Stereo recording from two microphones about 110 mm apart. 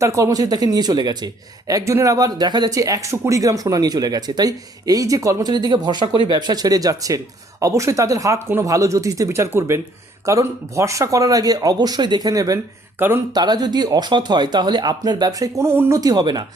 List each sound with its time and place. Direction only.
0.0 s speech: 30° right (ahead or behind)
13.0 s speech: 20° right (ahead or behind)
13.3 s speech: 40° right (ahead or behind); by 16.0 s 20° right (ahead or behind)
16.0 s speech: 35° right (ahead or behind)